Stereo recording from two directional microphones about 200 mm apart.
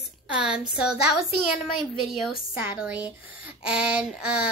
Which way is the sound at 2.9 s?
25° left (ahead or behind).